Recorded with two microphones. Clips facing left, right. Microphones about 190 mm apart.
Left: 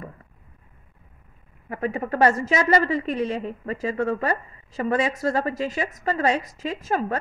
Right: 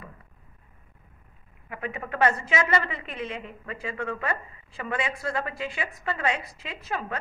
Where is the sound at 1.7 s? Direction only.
40° left (ahead or behind).